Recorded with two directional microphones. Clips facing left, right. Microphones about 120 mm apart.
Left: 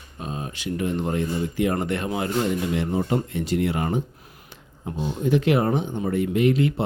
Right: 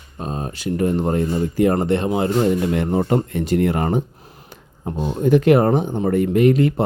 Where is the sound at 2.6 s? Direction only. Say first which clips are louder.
Right 5 dB; 50° right (ahead or behind).